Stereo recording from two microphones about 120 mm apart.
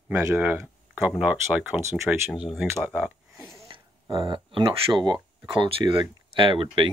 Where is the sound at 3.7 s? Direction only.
45° right (ahead or behind).